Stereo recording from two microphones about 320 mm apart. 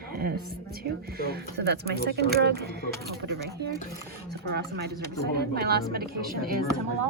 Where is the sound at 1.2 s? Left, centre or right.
Right.